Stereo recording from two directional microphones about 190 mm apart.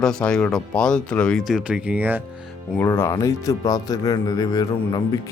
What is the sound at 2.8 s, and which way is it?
Speech, 15° left (ahead or behind).